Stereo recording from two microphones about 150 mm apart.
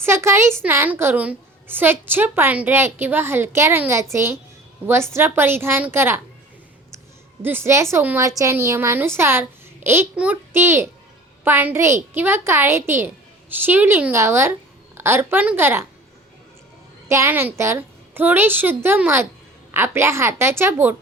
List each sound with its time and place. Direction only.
0.0 s a woman's voice: 20° right (ahead or behind)
7.4 s a woman's voice: 15° right (ahead or behind)
17.1 s a woman's voice: 15° right (ahead or behind)